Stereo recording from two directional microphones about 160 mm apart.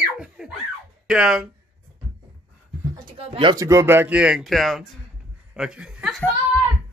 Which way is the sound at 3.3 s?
30° right (ahead or behind).